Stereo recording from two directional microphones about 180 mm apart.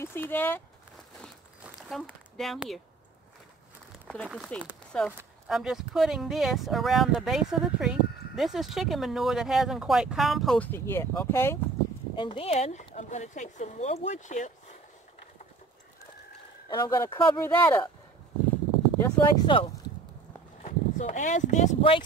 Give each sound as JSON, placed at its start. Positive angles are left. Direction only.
{"t": 0.0, "sound": "speech", "side_deg": 10}
{"t": 1.2, "sound": "a sound", "side_deg": 0}
{"t": 3.9, "sound": "speech", "side_deg": 0}
{"t": 12.2, "sound": "speech", "side_deg": 30}
{"t": 16.6, "sound": "speech", "side_deg": 25}
{"t": 18.9, "sound": "speech", "side_deg": 20}
{"t": 20.6, "sound": "speech", "side_deg": 40}